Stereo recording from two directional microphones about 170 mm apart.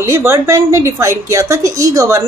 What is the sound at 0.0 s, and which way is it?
A woman's voice, 15° right (ahead or behind).